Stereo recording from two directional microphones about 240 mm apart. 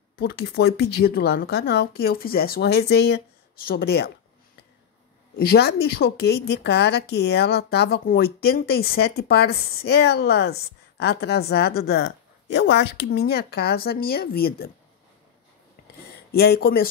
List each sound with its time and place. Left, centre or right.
0.1 s speech: left
5.3 s speech: left
16.3 s speech: left